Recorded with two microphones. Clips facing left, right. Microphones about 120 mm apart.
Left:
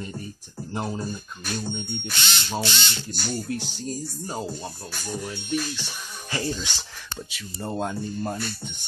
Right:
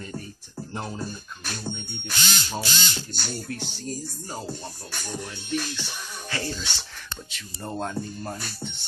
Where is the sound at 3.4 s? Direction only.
15° left (ahead or behind).